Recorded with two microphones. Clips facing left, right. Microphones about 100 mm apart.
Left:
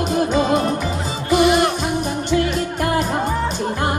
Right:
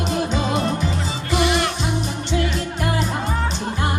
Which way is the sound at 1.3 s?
45° left (ahead or behind).